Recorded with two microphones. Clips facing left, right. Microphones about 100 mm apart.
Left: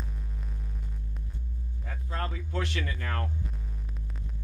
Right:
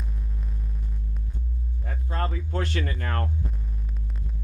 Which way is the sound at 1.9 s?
40° right (ahead or behind).